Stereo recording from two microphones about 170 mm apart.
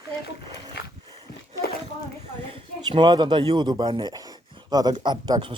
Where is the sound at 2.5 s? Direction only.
30° right (ahead or behind).